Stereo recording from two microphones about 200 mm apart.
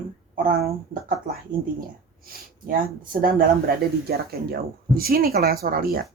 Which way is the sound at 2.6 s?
45° right (ahead or behind).